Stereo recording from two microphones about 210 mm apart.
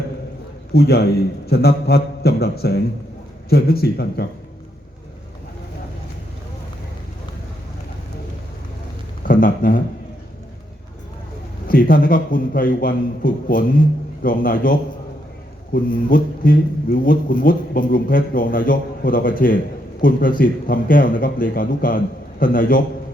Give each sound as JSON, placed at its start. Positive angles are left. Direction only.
{"t": 0.7, "sound": "a man's voice", "side_deg": 50}
{"t": 9.2, "sound": "a sound", "side_deg": 40}
{"t": 11.7, "sound": "a man's voice", "side_deg": 40}